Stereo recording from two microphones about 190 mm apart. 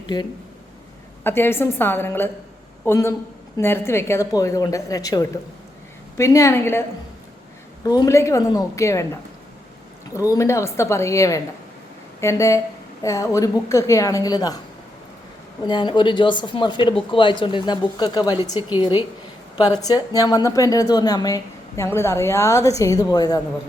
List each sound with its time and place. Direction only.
0.0 s speech: 25° left (ahead or behind)
1.2 s a woman's voice: 10° left (ahead or behind)
7.9 s a woman's voice: 20° left (ahead or behind)
10.2 s a woman's voice: 15° left (ahead or behind)
15.6 s a woman's voice: 25° left (ahead or behind)